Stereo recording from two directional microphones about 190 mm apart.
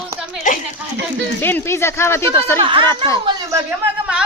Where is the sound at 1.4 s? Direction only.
10° left (ahead or behind).